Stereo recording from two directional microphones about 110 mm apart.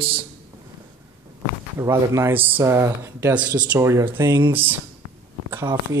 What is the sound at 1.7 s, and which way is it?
Speech, 25° right (ahead or behind).